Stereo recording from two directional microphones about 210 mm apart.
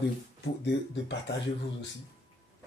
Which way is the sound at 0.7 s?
55° left (ahead or behind).